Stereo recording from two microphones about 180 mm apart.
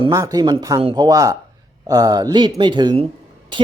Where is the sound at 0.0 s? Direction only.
20° right (ahead or behind).